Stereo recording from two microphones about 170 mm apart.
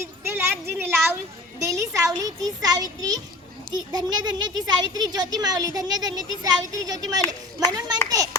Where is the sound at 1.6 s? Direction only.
20° right (ahead or behind).